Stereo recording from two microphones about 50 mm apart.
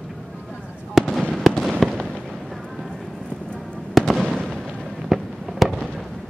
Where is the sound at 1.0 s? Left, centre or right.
Centre.